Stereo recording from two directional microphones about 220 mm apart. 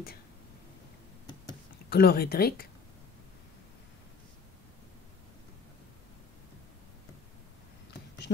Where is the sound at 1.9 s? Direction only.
45° left (ahead or behind).